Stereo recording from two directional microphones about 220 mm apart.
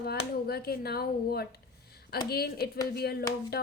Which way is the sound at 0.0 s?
45° left (ahead or behind).